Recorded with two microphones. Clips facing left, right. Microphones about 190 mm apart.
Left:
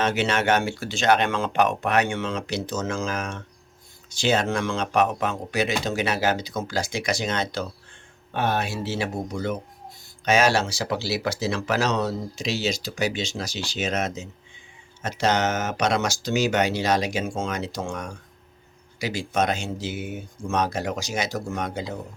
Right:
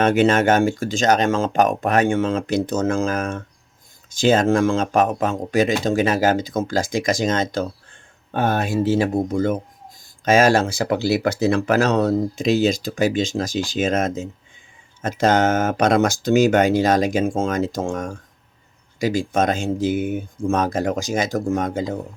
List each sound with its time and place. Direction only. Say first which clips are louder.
0.0 s speech: right 7 dB; 55° right (ahead or behind)